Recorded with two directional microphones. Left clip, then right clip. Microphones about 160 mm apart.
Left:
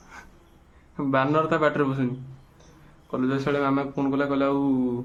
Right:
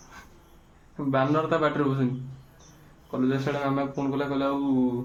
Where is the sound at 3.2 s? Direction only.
15° left (ahead or behind).